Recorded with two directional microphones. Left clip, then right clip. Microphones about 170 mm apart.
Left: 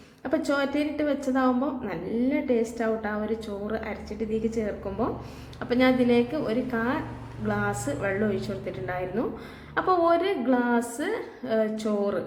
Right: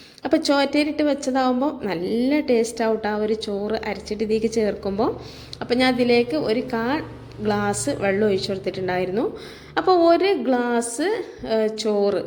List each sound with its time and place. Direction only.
0.2 s a woman's voice: 35° right (ahead or behind)